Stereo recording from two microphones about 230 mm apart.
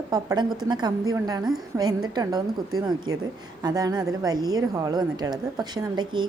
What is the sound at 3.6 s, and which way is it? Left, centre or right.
A woman's voice, centre.